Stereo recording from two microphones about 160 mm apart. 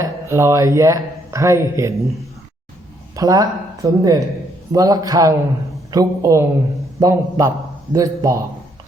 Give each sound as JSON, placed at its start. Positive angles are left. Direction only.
{"t": 0.0, "sound": "speech", "side_deg": -20}
{"t": 3.2, "sound": "speech", "side_deg": -20}